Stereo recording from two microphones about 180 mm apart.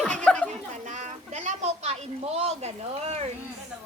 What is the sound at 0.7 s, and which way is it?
A woman's voice, 40° right (ahead or behind).